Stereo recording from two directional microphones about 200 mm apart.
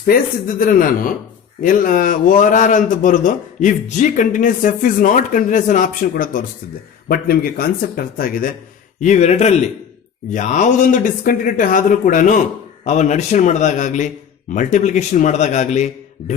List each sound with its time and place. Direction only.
0.0 s a man's voice: 45° left (ahead or behind)